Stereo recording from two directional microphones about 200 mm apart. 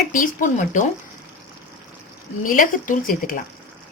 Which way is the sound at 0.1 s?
40° left (ahead or behind).